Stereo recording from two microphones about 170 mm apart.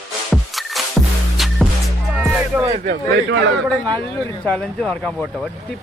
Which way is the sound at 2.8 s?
75° right (ahead or behind).